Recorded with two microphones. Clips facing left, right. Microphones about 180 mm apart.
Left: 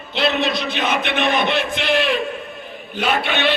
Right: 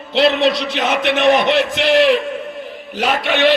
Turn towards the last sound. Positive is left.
turn(degrees=-85)